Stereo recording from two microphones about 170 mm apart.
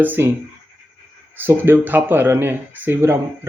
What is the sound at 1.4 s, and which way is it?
Speech, 15° right (ahead or behind).